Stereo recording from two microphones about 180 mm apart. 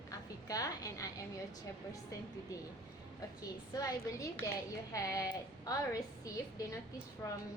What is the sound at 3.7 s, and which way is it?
A woman's voice, 20° left (ahead or behind).